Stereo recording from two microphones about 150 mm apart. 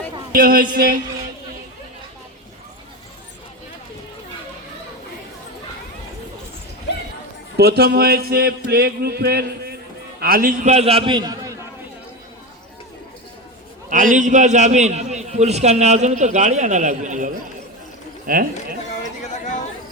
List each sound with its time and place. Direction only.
0.3 s speech: 70° right (ahead or behind)
7.5 s a sound: 90° right
10.2 s a man's voice: 75° right (ahead or behind); by 11.5 s 25° right (ahead or behind)
13.9 s a man's voice: 60° right (ahead or behind)
18.3 s speech: 70° right (ahead or behind)